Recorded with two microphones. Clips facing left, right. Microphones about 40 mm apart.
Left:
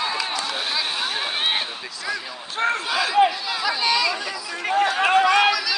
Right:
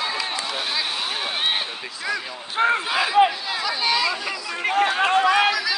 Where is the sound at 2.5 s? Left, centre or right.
Centre.